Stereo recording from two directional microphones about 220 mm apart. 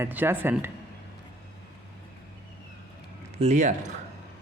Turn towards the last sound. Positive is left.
turn(degrees=-30)  # may be behind; listen again after turning